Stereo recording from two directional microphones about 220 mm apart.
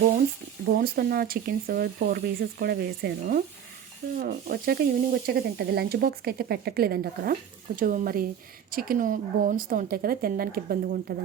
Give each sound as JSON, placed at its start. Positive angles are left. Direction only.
{"t": 0.8, "sound": "a woman's voice", "side_deg": -45}